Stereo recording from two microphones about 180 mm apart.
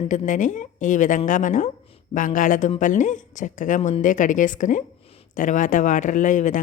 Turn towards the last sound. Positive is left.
turn(degrees=45)  # may be behind; listen again after turning